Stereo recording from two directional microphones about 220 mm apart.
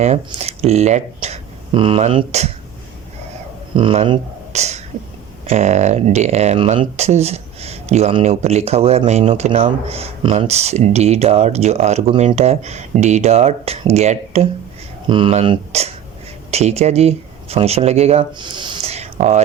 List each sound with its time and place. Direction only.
0.0 s speech: 30° right (ahead or behind)
3.8 s speech: 25° right (ahead or behind)